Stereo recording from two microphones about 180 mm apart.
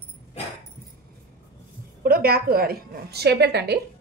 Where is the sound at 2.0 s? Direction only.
55° right (ahead or behind).